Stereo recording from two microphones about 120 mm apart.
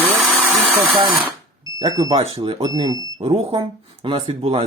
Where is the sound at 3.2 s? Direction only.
55° right (ahead or behind).